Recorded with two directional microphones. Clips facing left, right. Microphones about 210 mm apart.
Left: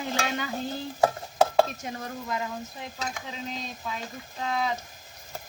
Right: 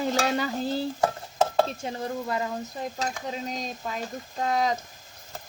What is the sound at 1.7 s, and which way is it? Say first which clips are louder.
Speech: right 4 dB; 30° right (ahead or behind).